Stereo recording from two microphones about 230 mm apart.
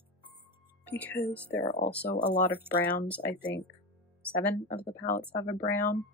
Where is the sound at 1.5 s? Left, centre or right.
Left.